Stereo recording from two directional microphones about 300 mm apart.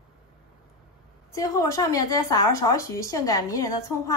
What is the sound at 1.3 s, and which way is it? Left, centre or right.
A woman's voice, centre.